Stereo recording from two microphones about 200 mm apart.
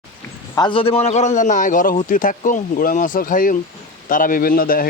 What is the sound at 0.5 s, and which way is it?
A man's voice, 25° left (ahead or behind).